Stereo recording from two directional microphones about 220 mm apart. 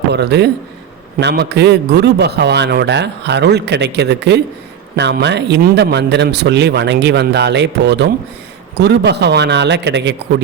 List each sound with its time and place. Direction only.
0.1 s speech: 50° right (ahead or behind)